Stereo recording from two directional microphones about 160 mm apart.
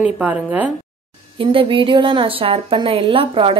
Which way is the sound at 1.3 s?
35° right (ahead or behind).